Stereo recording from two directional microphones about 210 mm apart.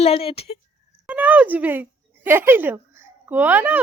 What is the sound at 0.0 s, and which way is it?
Speech, 30° left (ahead or behind).